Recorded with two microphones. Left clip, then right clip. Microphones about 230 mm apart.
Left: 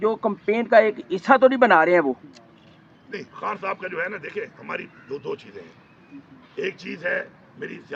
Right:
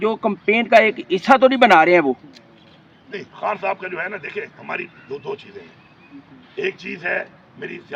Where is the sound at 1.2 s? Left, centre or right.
Right.